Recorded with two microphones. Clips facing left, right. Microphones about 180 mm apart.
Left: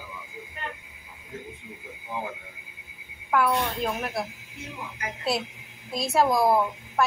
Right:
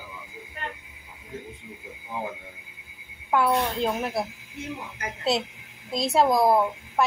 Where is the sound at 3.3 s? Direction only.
25° right (ahead or behind).